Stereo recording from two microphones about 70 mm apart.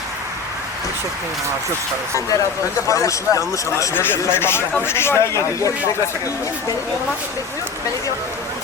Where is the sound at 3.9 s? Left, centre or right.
Left.